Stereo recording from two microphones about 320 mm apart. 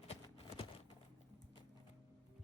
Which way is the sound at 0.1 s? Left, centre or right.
Centre.